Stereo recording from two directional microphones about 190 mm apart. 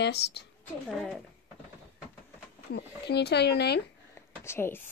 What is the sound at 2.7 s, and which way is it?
Speech, 60° left (ahead or behind).